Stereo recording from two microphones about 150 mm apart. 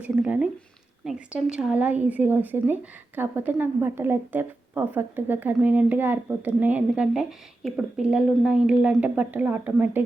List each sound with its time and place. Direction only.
0.0 s speech: 10° right (ahead or behind)